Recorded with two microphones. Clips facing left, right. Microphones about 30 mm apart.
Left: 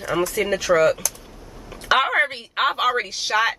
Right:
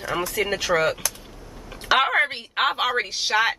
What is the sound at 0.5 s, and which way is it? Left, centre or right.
Speech, centre.